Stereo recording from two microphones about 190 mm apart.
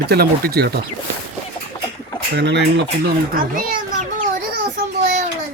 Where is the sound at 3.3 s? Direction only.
45° right (ahead or behind).